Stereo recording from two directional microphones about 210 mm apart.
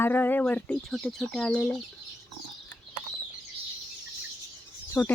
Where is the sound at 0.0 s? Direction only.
10° left (ahead or behind).